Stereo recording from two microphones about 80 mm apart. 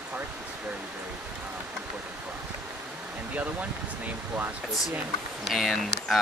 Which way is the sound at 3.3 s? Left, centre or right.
Centre.